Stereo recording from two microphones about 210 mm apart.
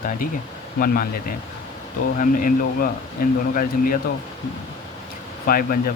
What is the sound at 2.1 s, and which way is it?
Speech, 40° left (ahead or behind).